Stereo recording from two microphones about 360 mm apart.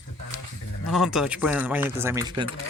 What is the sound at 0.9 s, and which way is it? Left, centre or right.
Speech, centre.